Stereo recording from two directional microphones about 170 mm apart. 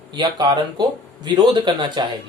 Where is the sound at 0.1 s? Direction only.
25° right (ahead or behind).